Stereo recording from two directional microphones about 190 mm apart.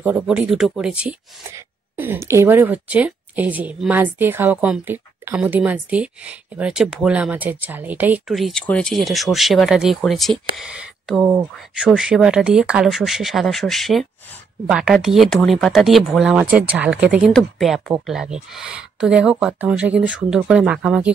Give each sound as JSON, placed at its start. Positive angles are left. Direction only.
{"t": 0.0, "sound": "speech", "side_deg": -5}